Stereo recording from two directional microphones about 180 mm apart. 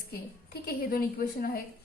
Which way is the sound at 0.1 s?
60° left (ahead or behind).